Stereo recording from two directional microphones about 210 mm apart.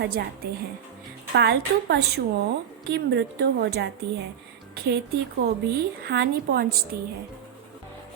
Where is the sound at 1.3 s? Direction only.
50° right (ahead or behind).